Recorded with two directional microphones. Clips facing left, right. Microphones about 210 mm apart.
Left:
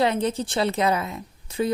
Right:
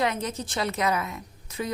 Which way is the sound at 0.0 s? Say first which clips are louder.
Left 5 dB; 30° left (ahead or behind).